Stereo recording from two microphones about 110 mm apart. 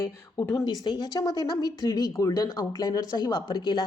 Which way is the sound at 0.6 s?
40° left (ahead or behind).